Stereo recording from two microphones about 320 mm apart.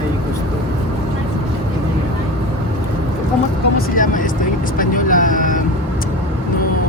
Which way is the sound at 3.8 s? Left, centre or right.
Left.